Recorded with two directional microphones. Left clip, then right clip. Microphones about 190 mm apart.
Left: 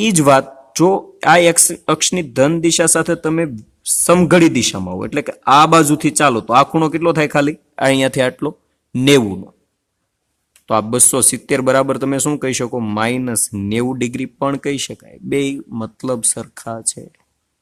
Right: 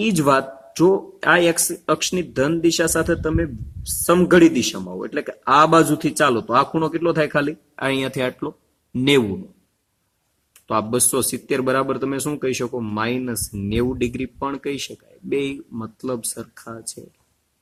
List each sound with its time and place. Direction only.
0.0 s speech: 45° left (ahead or behind)
10.7 s speech: 45° left (ahead or behind)